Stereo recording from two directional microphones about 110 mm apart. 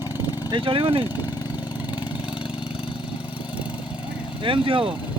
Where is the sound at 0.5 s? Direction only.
55° right (ahead or behind).